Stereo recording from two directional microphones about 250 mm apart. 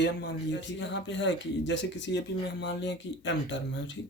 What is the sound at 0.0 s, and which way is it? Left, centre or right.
Speech, left.